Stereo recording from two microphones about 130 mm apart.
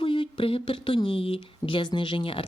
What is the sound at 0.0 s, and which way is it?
Speech, 40° left (ahead or behind).